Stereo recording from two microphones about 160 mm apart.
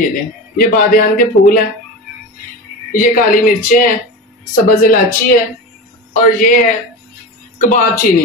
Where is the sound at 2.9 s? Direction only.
60° left (ahead or behind).